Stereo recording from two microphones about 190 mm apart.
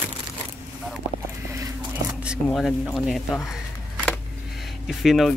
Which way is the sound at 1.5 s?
20° right (ahead or behind).